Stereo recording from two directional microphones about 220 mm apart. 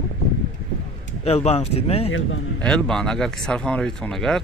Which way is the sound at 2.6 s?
Centre (ahead or behind).